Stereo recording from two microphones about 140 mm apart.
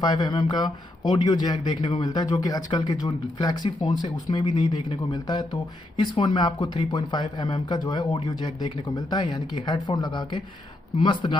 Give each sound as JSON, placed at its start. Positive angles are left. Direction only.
{"t": 0.0, "sound": "speech", "side_deg": 30}